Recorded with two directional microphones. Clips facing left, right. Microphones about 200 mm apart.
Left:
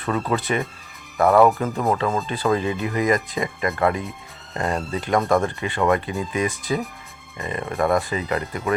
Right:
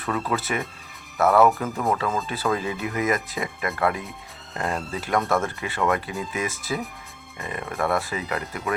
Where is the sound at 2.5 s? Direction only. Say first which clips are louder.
Left 4 dB; 5° right (ahead or behind).